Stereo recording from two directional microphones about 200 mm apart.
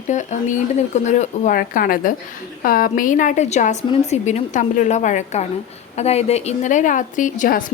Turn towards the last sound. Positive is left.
turn(degrees=40)  # may be behind; listen again after turning